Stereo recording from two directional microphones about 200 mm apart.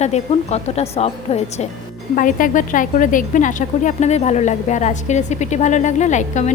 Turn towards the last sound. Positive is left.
turn(degrees=35)  # may be behind; listen again after turning